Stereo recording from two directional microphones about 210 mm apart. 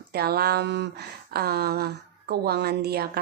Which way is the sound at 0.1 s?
50° right (ahead or behind).